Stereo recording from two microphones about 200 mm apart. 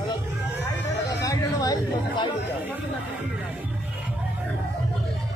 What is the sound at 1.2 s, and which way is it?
Chatter, 15° left (ahead or behind).